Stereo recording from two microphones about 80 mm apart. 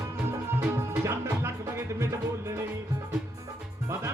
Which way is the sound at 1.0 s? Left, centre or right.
Right.